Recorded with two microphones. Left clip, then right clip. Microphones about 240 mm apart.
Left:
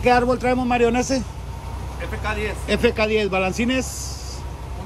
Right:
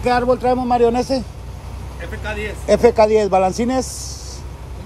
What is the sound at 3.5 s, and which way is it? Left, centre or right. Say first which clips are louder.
Speech: right 3 dB; right.